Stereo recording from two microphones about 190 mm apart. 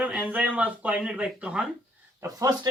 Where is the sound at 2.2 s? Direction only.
20° right (ahead or behind).